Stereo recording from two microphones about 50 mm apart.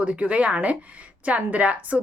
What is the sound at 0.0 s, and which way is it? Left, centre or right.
A woman's voice, right.